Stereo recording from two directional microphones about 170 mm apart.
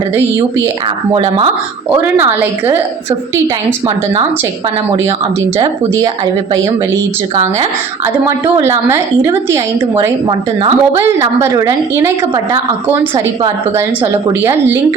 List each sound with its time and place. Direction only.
1.1 s speech: 30° right (ahead or behind)
2.0 s a woman's voice: 10° right (ahead or behind)
3.8 s a woman's voice: 25° right (ahead or behind)
8.5 s a woman's voice: 20° right (ahead or behind)